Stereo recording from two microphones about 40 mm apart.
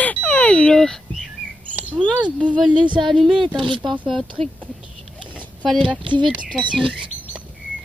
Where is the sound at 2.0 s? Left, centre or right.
Right.